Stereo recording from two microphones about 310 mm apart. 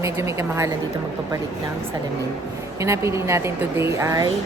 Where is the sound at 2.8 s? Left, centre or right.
Centre.